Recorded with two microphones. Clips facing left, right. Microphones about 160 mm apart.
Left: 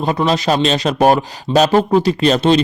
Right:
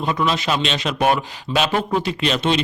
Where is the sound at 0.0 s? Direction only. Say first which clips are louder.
Left 5 dB; 35° left (ahead or behind).